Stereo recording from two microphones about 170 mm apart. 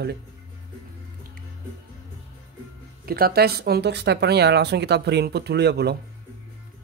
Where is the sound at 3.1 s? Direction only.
65° right (ahead or behind).